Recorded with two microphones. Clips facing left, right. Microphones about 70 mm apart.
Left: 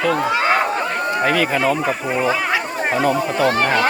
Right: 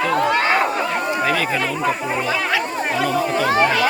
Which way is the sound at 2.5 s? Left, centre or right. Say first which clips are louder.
Left 1 dB; left.